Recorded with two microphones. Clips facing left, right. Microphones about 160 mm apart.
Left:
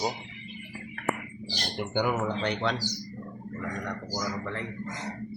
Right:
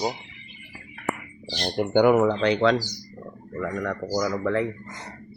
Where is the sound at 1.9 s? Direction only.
60° right (ahead or behind); by 2.7 s 90° right.